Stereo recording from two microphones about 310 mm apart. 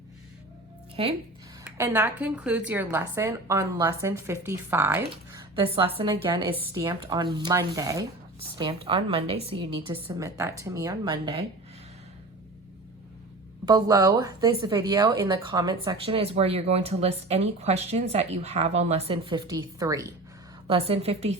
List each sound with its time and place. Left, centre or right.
1.0 s speech: centre
1.6 s a woman's voice: centre
5.3 s a sound: centre
6.0 s speech: centre
13.7 s a woman's voice: centre